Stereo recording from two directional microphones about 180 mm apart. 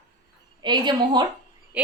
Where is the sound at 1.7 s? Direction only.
5° right (ahead or behind).